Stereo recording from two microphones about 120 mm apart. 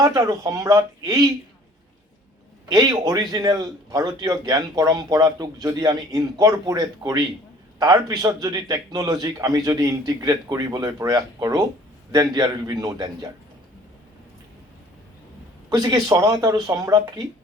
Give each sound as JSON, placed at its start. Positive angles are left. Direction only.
{"t": 0.0, "sound": "a man's voice", "side_deg": -30}
{"t": 2.6, "sound": "a man's voice", "side_deg": -30}
{"t": 15.7, "sound": "a man's voice", "side_deg": -35}